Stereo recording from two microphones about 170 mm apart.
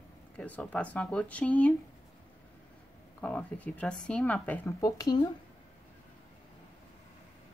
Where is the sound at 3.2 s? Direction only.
10° left (ahead or behind).